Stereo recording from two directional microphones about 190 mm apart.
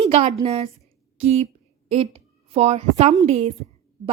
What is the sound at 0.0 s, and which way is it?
A woman's voice, 30° right (ahead or behind).